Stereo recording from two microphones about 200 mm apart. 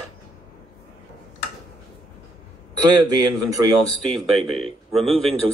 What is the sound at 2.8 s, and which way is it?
Speech, 20° right (ahead or behind).